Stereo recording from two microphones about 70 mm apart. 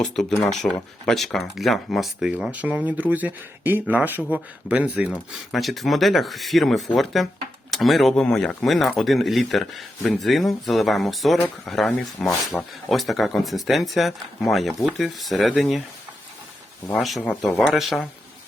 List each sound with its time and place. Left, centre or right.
0.0 s speech: centre
2.5 s speech: right
5.5 s speech: centre
16.9 s speech: centre